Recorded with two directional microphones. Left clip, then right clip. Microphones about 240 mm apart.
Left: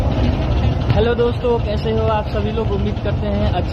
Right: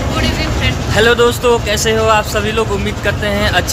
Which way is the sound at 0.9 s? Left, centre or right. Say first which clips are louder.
Right 7 dB; right.